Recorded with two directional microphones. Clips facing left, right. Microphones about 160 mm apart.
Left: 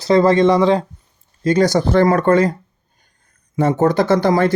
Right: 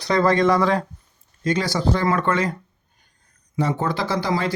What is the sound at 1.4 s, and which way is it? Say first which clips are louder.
Speech: left 7 dB; 40° left (ahead or behind).